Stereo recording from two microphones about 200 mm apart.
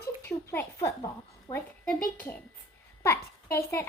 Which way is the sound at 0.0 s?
15° left (ahead or behind).